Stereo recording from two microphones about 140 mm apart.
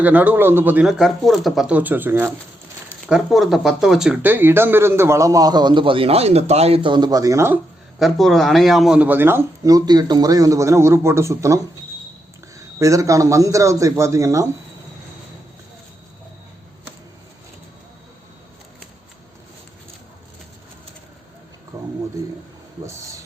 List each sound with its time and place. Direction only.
0.0 s speech: 10° right (ahead or behind)
3.1 s speech: centre (ahead or behind)
4.2 s speech: 15° right (ahead or behind)
7.9 s speech: centre (ahead or behind); by 14.4 s 20° right (ahead or behind)
21.7 s a sound: 20° right (ahead or behind)